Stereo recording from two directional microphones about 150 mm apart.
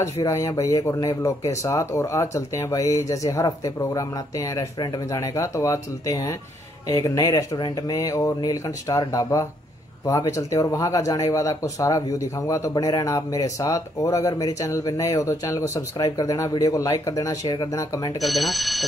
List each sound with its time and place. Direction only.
0.0 s speech: 20° left (ahead or behind)
18.2 s speech: centre (ahead or behind)